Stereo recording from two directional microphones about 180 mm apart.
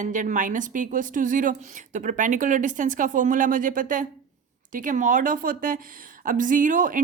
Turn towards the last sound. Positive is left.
turn(degrees=-45)  # may be behind; listen again after turning